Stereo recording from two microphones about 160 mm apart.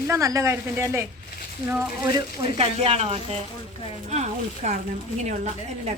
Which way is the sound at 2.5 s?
40° right (ahead or behind).